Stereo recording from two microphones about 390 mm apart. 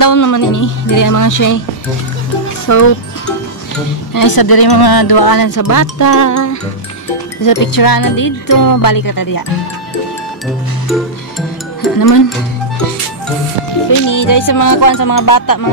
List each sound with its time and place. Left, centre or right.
0.0 s speech: left
4.1 s speech: left
7.4 s speech: left
10.9 s music: centre
13.8 s speech: left